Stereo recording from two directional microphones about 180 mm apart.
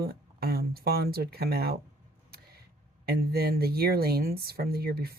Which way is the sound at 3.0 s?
60° right (ahead or behind).